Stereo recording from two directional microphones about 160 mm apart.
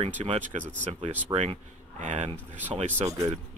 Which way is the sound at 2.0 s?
50° right (ahead or behind).